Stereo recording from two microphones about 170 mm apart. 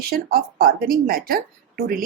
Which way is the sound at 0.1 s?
60° right (ahead or behind).